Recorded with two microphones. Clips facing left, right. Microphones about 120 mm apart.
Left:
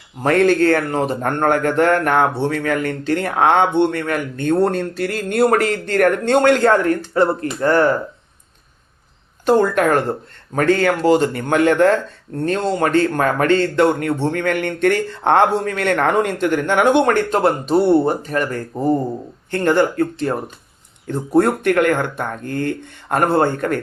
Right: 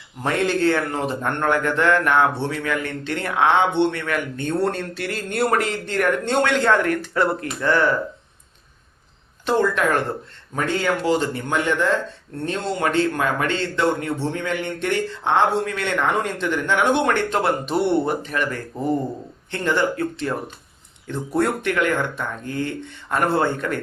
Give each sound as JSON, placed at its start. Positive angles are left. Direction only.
{"t": 0.3, "sound": "a man's voice", "side_deg": 50}
{"t": 7.7, "sound": "a man's voice", "side_deg": 45}
{"t": 9.5, "sound": "a man's voice", "side_deg": 50}
{"t": 11.0, "sound": "speech", "side_deg": 45}
{"t": 12.5, "sound": "a man's voice", "side_deg": 45}